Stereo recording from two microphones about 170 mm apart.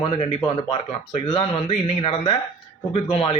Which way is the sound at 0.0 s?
30° left (ahead or behind).